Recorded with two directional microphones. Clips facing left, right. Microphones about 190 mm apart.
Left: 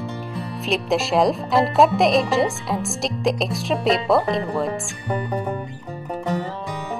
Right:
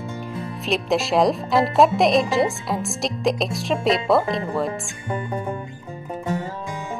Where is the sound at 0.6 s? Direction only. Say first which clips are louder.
Even; centre (ahead or behind).